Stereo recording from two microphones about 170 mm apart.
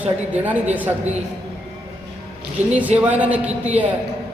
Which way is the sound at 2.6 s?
40° right (ahead or behind).